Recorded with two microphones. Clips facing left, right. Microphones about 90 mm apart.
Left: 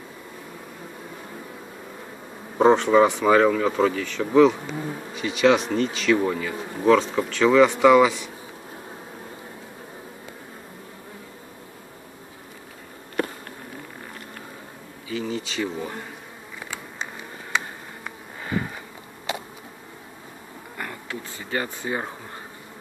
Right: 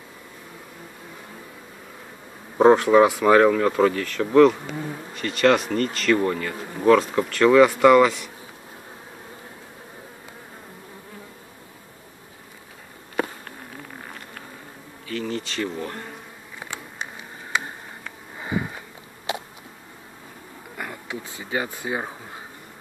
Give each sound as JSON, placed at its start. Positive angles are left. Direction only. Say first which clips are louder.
{"t": 2.5, "sound": "speech", "louder": "right 2 dB", "side_deg": -5}
{"t": 15.0, "sound": "speech", "louder": "even", "side_deg": 5}
{"t": 18.4, "sound": "sniff", "louder": "right 1 dB", "side_deg": -15}
{"t": 20.7, "sound": "speech", "louder": "right 1 dB", "side_deg": -10}